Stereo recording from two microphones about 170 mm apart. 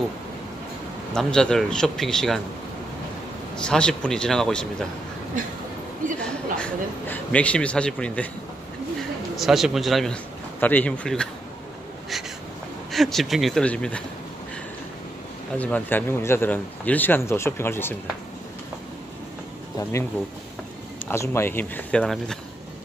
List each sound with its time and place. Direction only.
1.1 s speech: 5° left (ahead or behind)
3.5 s speech: 5° left (ahead or behind)
6.2 s speech: 5° left (ahead or behind)
9.4 s speech: centre (ahead or behind)
12.9 s speech: centre (ahead or behind)
15.5 s speech: 10° left (ahead or behind)
19.8 s speech: 15° left (ahead or behind)
21.1 s speech: 15° left (ahead or behind)